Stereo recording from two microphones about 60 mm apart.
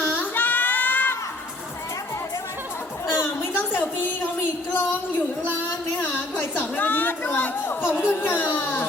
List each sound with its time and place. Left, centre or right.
0.2 s child singing: left
3.1 s a sound: left
6.4 s speech: left